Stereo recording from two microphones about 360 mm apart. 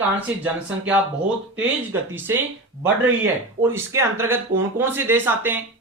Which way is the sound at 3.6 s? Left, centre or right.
Centre.